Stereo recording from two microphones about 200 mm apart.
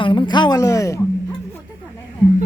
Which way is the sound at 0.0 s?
25° left (ahead or behind).